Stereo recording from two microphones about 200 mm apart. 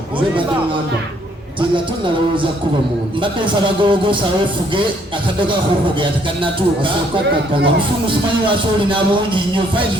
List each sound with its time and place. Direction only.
3.4 s speech: 25° right (ahead or behind)
8.0 s speech: 25° right (ahead or behind)